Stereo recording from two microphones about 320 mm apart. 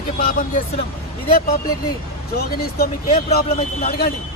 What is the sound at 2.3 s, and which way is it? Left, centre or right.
Speech, left.